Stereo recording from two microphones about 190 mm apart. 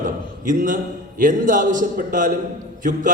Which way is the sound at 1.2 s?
45° right (ahead or behind).